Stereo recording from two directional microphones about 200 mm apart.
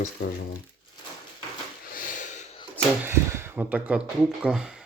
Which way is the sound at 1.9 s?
40° left (ahead or behind).